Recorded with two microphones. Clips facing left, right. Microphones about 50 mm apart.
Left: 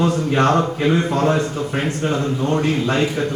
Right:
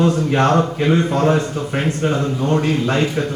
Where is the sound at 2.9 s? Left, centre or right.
Centre.